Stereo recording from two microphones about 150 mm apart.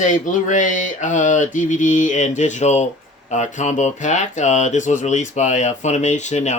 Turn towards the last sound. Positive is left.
turn(degrees=50)  # may be behind; listen again after turning